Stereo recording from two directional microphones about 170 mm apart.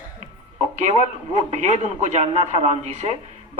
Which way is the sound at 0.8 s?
45° right (ahead or behind).